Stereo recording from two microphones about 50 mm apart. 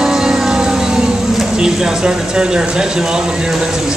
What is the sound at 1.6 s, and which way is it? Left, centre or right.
Speech, centre.